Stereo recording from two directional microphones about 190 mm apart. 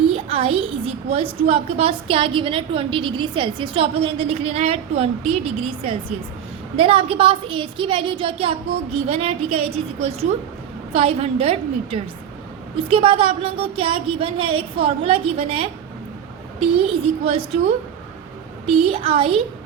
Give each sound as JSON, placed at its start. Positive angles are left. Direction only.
{"t": 0.1, "sound": "a woman's voice", "side_deg": -30}